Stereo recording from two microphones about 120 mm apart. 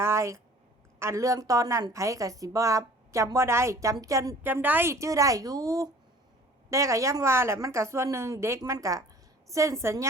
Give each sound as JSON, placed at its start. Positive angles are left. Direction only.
{"t": 0.0, "sound": "a woman's voice", "side_deg": -25}